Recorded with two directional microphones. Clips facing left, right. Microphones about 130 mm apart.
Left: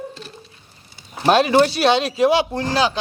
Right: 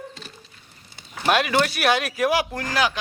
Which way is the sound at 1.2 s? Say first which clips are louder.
Left 6 dB; 30° left (ahead or behind).